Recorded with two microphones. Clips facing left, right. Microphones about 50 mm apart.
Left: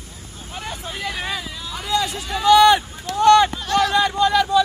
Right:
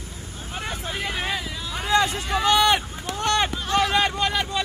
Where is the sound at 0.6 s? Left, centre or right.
Centre.